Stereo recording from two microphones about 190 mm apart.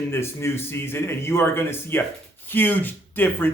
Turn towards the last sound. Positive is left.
turn(degrees=10)  # may be behind; listen again after turning